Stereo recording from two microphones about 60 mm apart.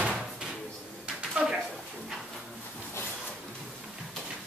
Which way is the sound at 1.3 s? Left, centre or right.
Centre.